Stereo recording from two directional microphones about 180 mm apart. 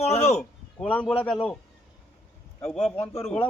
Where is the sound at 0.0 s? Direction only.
35° left (ahead or behind).